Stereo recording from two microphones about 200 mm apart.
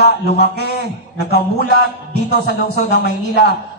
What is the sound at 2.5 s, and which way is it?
A man's voice, 55° left (ahead or behind).